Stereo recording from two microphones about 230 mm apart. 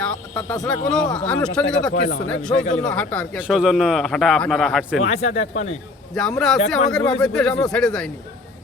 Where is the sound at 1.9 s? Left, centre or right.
Left.